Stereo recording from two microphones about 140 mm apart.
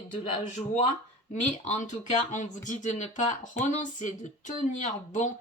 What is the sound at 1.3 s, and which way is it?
Speech, 55° left (ahead or behind).